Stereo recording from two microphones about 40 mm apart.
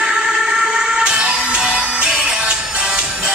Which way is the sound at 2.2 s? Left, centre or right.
Right.